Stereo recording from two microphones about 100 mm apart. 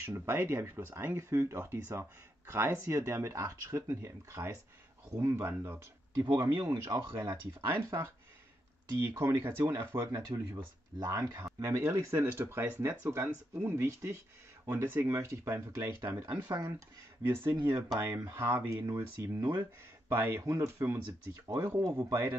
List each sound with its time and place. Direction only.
0.0 s speech: 25° right (ahead or behind)
5.6 s speech: 40° right (ahead or behind)
17.2 s speech: 25° right (ahead or behind)